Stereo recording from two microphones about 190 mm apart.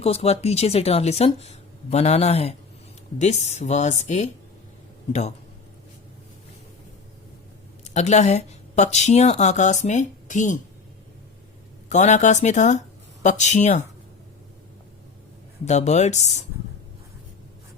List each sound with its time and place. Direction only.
0.0 s speech: 30° left (ahead or behind)
7.9 s speech: 40° left (ahead or behind)
11.9 s speech: 40° left (ahead or behind)
15.6 s speech: 35° left (ahead or behind)